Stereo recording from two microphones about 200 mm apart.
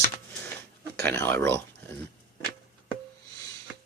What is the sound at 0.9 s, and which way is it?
Speech, 15° left (ahead or behind).